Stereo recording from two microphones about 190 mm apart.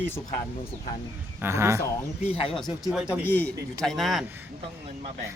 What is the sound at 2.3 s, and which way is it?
Speech, 30° left (ahead or behind).